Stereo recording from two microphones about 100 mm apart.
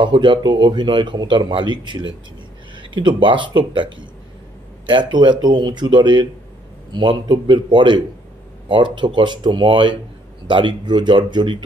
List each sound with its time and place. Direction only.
0.0 s speech: 55° right (ahead or behind)